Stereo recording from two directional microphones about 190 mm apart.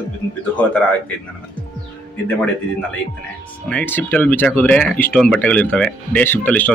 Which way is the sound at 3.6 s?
10° left (ahead or behind).